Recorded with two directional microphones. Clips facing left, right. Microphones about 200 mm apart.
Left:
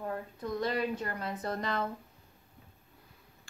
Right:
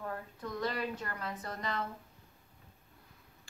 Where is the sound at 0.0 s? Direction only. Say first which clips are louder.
Left 4 dB; 25° left (ahead or behind).